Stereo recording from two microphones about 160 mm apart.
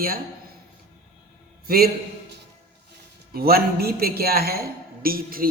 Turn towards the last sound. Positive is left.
turn(degrees=-65)  # may be behind; listen again after turning